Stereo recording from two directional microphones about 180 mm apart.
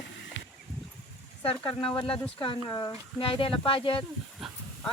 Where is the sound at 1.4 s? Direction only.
30° left (ahead or behind).